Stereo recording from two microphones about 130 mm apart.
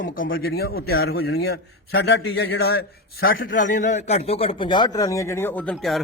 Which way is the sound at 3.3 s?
85° left.